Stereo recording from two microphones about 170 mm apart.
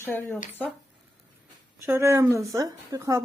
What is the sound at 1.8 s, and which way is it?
A woman's voice, 15° right (ahead or behind).